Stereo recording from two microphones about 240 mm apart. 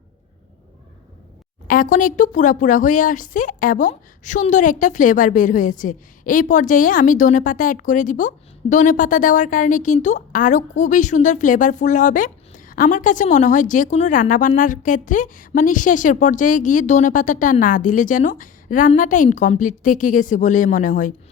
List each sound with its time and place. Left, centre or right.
1.6 s a woman's voice: left